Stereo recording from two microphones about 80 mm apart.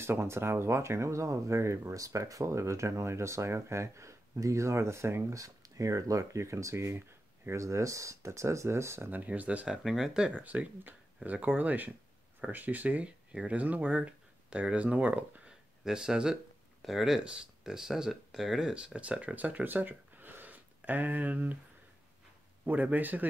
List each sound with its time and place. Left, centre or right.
0.0 s speech: right
9.2 s speech: centre
9.8 s speech: centre
10.4 s speech: centre
18.9 s speech: centre
22.7 s speech: right